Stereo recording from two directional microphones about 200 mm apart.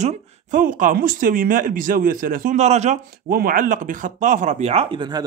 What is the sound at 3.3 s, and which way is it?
Speech, 45° right (ahead or behind).